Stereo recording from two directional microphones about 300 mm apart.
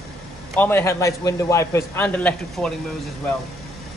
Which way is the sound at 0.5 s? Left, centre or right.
Centre.